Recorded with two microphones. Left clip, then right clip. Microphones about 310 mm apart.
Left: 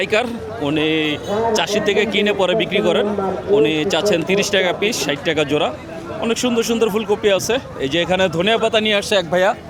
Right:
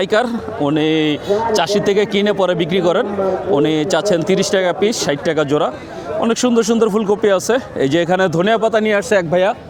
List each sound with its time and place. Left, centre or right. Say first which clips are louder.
0.0 s speech: right 3 dB; right
8.9 s speech: right 2 dB; right